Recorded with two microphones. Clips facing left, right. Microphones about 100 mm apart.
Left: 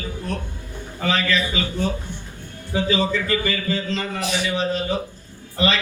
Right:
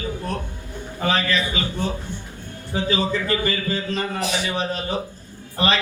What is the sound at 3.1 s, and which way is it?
A man's voice, 35° right (ahead or behind).